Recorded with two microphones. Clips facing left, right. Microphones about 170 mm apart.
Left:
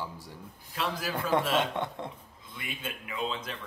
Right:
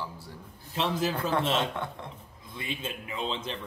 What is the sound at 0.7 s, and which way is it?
Speech, 25° right (ahead or behind).